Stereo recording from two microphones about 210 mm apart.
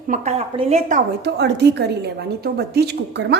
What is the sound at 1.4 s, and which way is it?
A woman's voice, 50° right (ahead or behind).